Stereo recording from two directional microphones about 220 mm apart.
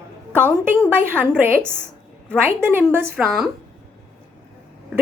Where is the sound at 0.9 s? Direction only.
10° right (ahead or behind).